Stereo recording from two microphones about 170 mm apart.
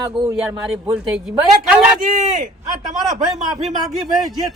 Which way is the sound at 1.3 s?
5° right (ahead or behind).